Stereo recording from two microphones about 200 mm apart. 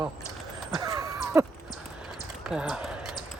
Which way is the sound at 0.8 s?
15° right (ahead or behind).